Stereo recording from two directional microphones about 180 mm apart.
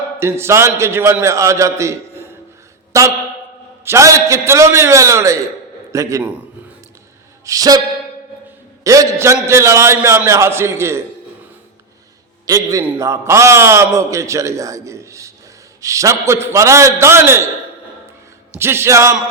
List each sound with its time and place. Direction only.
0.2 s a man's voice: 15° right (ahead or behind)
7.4 s a sound: 20° right (ahead or behind)
8.8 s a man's voice: 15° right (ahead or behind)
12.5 s a sound: 20° right (ahead or behind)
12.8 s a man's voice: 15° right (ahead or behind)
18.5 s a man's voice: 15° right (ahead or behind)